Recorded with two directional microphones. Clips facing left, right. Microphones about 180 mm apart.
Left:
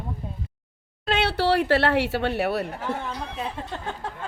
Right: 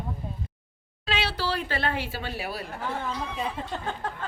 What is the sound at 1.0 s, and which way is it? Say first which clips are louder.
Speech: left 6 dB; 60° left (ahead or behind).